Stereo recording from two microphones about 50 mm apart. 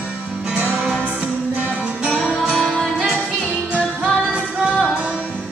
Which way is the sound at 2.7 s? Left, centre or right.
Centre.